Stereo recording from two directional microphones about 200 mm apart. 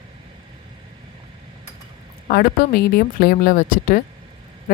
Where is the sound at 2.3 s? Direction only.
50° left (ahead or behind).